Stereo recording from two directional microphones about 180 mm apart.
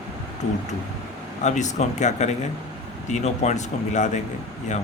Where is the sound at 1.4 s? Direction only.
40° left (ahead or behind).